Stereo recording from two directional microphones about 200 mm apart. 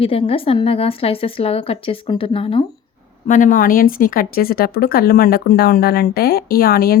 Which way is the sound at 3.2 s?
40° left (ahead or behind).